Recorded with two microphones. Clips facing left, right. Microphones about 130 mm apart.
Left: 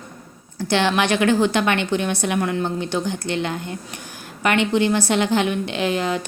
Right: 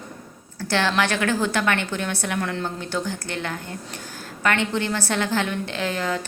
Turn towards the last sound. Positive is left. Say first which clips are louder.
# left 4 dB
turn(degrees=20)  # may be behind; listen again after turning